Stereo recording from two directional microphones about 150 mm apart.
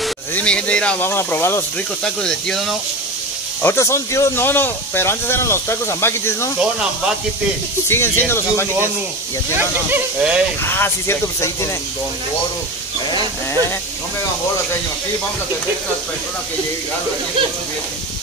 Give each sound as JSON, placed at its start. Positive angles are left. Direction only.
{"t": 0.3, "sound": "speech", "side_deg": 10}
{"t": 2.0, "sound": "speech", "side_deg": 5}
{"t": 3.6, "sound": "speech", "side_deg": 20}
{"t": 6.6, "sound": "speech", "side_deg": -5}
{"t": 7.9, "sound": "speech", "side_deg": 15}
{"t": 9.6, "sound": "speech", "side_deg": -15}
{"t": 10.6, "sound": "speech", "side_deg": 15}